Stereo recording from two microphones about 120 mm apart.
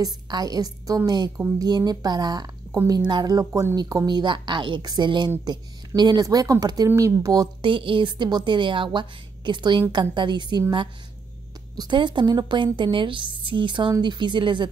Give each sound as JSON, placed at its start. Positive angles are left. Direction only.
{"t": 0.0, "sound": "a woman's voice", "side_deg": -35}
{"t": 7.7, "sound": "a woman's voice", "side_deg": -45}
{"t": 11.7, "sound": "a woman's voice", "side_deg": -40}